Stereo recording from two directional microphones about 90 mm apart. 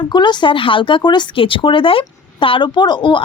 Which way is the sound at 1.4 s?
75° left (ahead or behind).